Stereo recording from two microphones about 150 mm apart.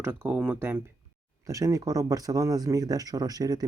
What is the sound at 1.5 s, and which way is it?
Speech, 20° right (ahead or behind).